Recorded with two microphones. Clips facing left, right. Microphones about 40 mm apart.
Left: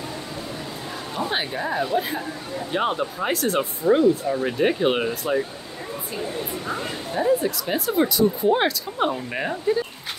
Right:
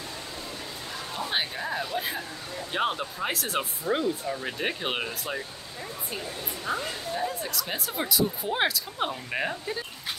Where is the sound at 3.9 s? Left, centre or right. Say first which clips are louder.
Left 10 dB; left.